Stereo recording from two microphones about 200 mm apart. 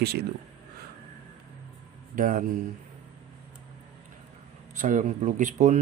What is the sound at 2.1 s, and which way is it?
Speech, 40° right (ahead or behind).